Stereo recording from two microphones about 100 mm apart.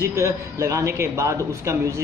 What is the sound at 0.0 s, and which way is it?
Speech, 30° right (ahead or behind).